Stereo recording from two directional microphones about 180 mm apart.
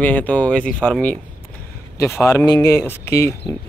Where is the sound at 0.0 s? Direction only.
10° left (ahead or behind).